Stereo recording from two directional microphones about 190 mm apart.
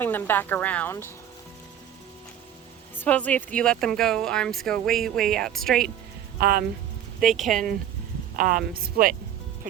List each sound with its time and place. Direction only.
0.0 s a woman's voice: 10° left (ahead or behind)
2.9 s speech: 10° left (ahead or behind)
6.4 s speech: 50° right (ahead or behind)
7.3 s speech: centre (ahead or behind)
8.4 s speech: 45° right (ahead or behind)